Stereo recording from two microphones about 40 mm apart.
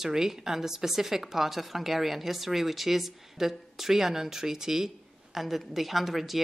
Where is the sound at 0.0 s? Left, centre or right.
Centre.